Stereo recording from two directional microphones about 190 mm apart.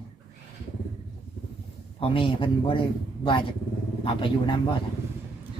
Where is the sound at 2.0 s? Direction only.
25° left (ahead or behind).